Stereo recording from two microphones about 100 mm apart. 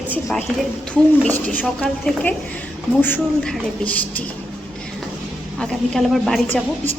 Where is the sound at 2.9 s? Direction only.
20° left (ahead or behind).